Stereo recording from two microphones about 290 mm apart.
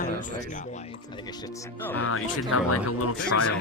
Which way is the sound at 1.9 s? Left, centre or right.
Left.